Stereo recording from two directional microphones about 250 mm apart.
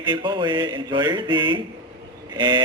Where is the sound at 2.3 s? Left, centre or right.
Centre.